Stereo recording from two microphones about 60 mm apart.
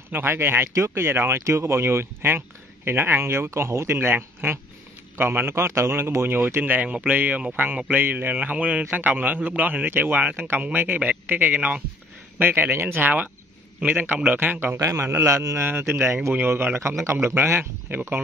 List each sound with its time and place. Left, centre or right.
0.1 s a man's voice: right
0.7 s speech: right
1.4 s a man's voice: right
14.3 s a man's voice: right
14.8 s a man's voice: right
15.6 s a man's voice: right
17.0 s a man's voice: right